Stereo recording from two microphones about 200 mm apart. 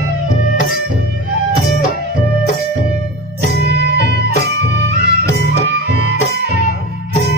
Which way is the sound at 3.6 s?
55° right (ahead or behind).